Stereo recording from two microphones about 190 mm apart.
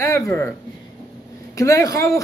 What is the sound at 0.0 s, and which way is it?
A man's voice, 15° left (ahead or behind).